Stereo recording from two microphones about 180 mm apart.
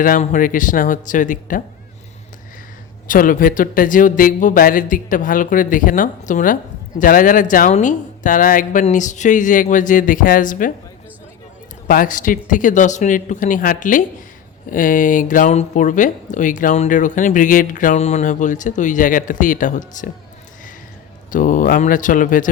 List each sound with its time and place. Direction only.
0.0 s speech: 45° left (ahead or behind)
3.1 s speech: 50° left (ahead or behind)
11.9 s speech: 50° left (ahead or behind)
21.2 s speech: 45° left (ahead or behind)